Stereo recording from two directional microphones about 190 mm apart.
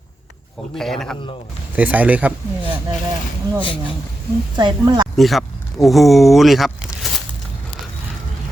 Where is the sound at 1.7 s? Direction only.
10° right (ahead or behind).